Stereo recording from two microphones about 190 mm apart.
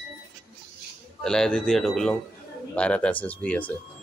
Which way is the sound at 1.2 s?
5° left (ahead or behind).